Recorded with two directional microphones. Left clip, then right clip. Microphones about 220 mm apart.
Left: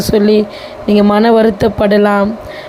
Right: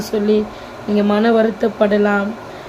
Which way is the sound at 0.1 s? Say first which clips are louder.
Left 6 dB; 35° left (ahead or behind).